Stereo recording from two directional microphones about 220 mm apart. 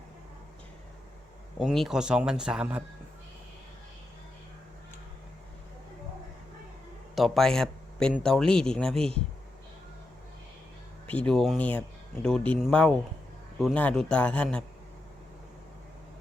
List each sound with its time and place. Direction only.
1.5 s speech: centre (ahead or behind)
7.2 s speech: centre (ahead or behind)
11.0 s speech: 5° left (ahead or behind)